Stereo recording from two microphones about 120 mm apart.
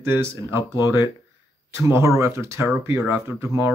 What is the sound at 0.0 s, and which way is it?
Speech, 20° right (ahead or behind).